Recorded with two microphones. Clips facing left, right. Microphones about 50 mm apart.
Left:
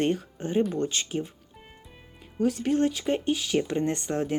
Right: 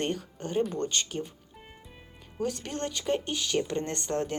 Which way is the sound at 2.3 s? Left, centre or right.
Centre.